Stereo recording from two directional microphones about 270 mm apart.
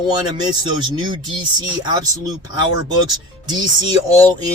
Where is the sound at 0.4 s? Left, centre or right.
Centre.